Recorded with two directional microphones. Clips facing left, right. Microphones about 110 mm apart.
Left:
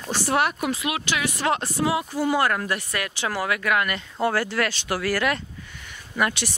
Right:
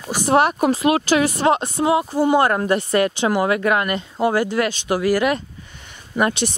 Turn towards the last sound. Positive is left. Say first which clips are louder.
# right 5 dB
turn(degrees=-25)  # may be behind; listen again after turning